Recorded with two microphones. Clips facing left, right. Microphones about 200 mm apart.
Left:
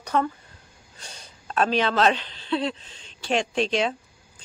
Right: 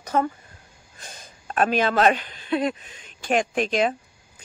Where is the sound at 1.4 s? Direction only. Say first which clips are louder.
Right 1 dB; 50° right (ahead or behind).